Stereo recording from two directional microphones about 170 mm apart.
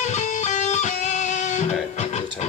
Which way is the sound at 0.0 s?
45° left (ahead or behind).